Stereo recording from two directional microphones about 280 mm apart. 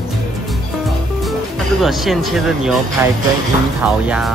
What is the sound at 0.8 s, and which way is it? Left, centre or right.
Music, centre.